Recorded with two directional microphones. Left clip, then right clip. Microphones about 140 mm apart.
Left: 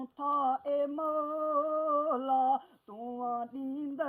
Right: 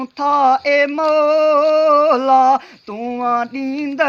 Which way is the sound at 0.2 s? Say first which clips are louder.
Right 16 dB; 45° right (ahead or behind).